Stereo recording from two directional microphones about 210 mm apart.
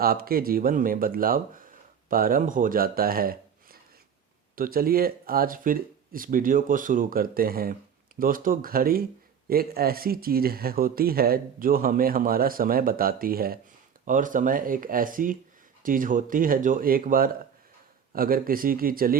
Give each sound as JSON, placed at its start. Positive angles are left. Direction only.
{"t": 0.0, "sound": "speech", "side_deg": -45}